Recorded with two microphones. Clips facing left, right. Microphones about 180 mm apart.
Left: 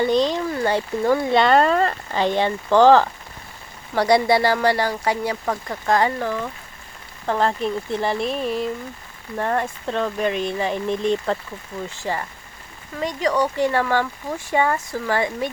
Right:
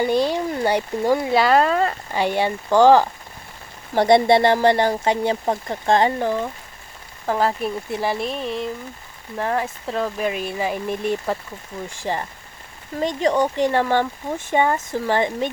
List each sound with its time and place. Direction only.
0.0 s speech: 10° right (ahead or behind)
3.9 s speech: 25° right (ahead or behind)
7.3 s speech: 5° right (ahead or behind); by 15.4 s 25° right (ahead or behind)